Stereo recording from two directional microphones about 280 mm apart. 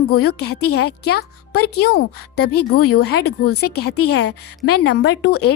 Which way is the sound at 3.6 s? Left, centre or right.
Left.